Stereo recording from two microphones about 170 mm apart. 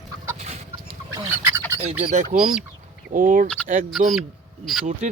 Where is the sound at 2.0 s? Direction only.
40° right (ahead or behind).